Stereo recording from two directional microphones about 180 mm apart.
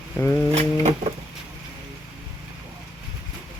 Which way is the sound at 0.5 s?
35° right (ahead or behind).